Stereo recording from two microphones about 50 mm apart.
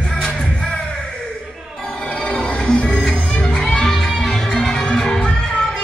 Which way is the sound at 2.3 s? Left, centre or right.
Centre.